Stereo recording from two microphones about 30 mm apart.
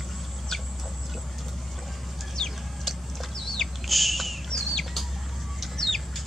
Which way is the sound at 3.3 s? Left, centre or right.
Centre.